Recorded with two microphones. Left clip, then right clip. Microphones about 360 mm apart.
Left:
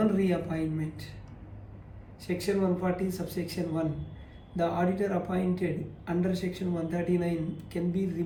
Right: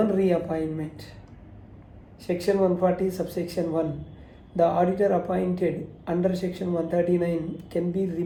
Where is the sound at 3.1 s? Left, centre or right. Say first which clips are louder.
Right 6 dB; centre.